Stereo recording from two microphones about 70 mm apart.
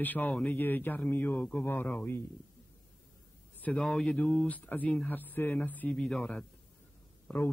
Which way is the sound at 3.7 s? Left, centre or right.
Centre.